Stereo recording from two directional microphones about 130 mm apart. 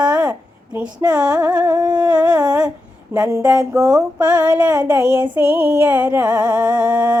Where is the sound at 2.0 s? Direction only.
10° right (ahead or behind).